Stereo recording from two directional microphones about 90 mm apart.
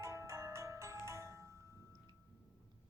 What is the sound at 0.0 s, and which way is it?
Marimba, 35° right (ahead or behind).